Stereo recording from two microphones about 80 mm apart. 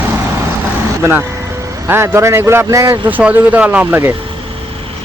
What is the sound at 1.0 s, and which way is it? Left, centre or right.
Speech, right.